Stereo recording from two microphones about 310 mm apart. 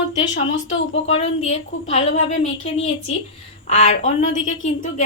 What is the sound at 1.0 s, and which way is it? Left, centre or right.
A woman's voice, left.